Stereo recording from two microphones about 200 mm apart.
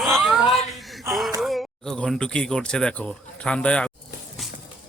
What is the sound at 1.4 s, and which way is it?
Speech, centre (ahead or behind).